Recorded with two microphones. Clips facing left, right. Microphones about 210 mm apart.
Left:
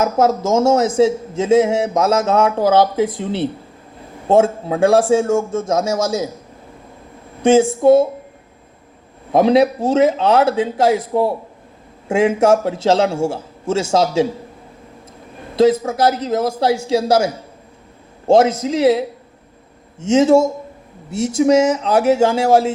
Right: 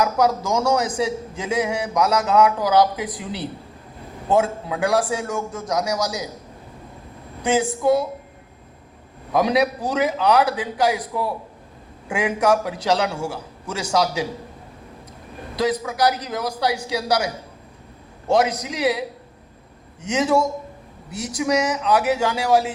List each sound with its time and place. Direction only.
0.0 s a man's voice: 25° left (ahead or behind)
7.4 s a man's voice: 25° left (ahead or behind)
9.3 s a man's voice: 25° left (ahead or behind)
15.5 s a woman's voice: 25° left (ahead or behind)